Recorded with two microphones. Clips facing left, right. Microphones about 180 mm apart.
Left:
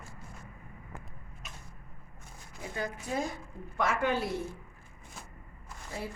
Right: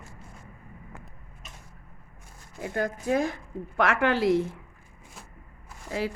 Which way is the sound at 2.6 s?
60° right (ahead or behind).